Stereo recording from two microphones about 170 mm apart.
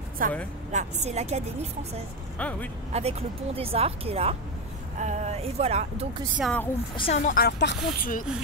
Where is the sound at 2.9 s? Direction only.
40° right (ahead or behind).